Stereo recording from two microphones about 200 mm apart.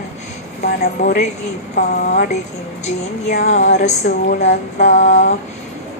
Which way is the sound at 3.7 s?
35° left (ahead or behind).